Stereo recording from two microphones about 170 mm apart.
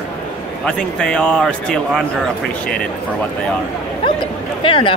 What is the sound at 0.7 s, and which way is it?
A man's voice, 5° left (ahead or behind).